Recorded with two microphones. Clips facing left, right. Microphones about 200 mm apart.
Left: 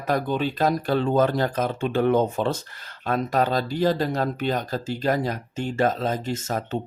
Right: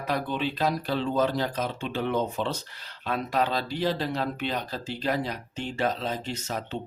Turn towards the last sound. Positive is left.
turn(degrees=45)  # may be behind; listen again after turning